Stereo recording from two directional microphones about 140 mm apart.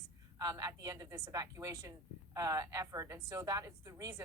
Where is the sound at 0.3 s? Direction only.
25° right (ahead or behind).